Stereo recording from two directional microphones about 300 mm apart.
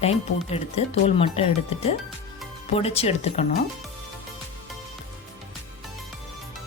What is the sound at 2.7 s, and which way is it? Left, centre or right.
Speech, centre.